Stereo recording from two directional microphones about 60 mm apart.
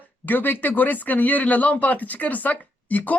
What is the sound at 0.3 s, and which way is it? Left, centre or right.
Speech, left.